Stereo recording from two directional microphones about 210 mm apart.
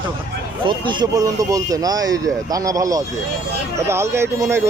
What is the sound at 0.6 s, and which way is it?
Speech, 20° right (ahead or behind).